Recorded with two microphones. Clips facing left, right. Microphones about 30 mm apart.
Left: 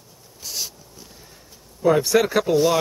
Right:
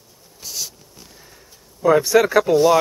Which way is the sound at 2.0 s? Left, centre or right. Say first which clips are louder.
Right 4 dB; centre.